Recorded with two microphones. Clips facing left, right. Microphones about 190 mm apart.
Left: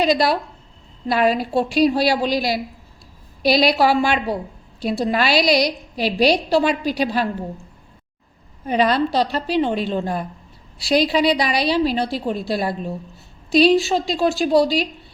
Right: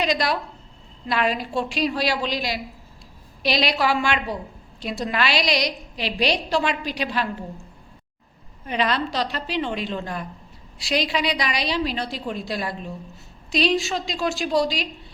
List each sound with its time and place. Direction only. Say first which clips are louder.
0.0 s a woman's voice: left 5 dB; 35° left (ahead or behind)
8.6 s a woman's voice: left 6 dB; 40° left (ahead or behind)
14.6 s speech: left 6 dB; 5° left (ahead or behind)